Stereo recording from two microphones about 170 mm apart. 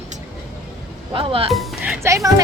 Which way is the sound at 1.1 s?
35° right (ahead or behind).